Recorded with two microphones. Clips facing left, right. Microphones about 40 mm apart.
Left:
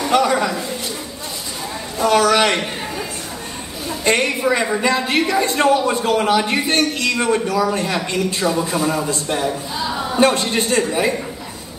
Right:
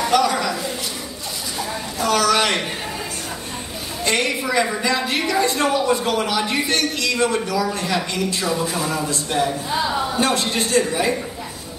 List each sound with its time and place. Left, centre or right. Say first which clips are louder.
0.1 s a sound: left 4 dB; left
2.0 s a woman's voice: left 4 dB; left
4.0 s a woman's voice: left 4 dB; left
10.2 s a woman's voice: left 9 dB; left